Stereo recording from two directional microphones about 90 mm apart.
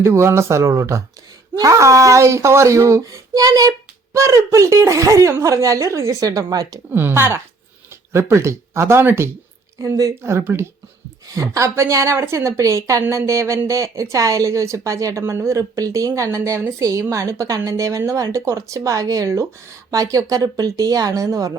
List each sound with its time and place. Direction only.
0.0 s speech: 30° right (ahead or behind)
6.9 s speech: 25° right (ahead or behind)